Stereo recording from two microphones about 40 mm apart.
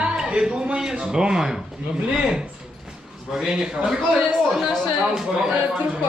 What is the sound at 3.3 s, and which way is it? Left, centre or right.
Speech, centre.